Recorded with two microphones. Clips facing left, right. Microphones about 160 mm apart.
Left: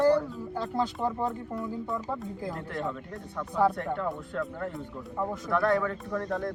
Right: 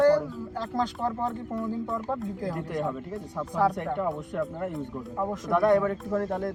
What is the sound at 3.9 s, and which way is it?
Speech, 15° right (ahead or behind).